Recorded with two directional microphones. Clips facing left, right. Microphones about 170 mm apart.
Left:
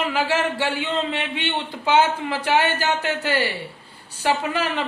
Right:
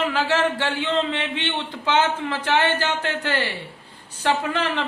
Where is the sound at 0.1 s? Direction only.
10° left (ahead or behind).